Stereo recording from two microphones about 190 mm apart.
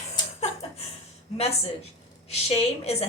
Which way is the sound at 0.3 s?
35° left (ahead or behind).